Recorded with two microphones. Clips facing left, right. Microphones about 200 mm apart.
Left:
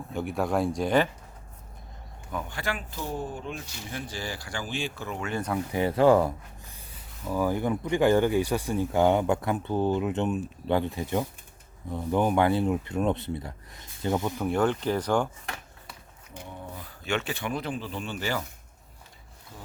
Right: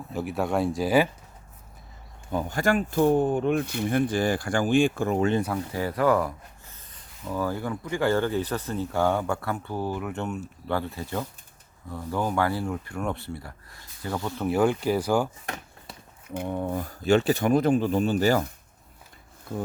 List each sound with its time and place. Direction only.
0.1 s speech: centre (ahead or behind)
2.3 s speech: 40° right (ahead or behind)
5.7 s speech: 25° left (ahead or behind)
6.7 s speech: 10° left (ahead or behind)
14.4 s speech: 5° right (ahead or behind)
16.3 s speech: 55° right (ahead or behind); by 18.4 s 40° right (ahead or behind)
19.5 s speech: 55° right (ahead or behind)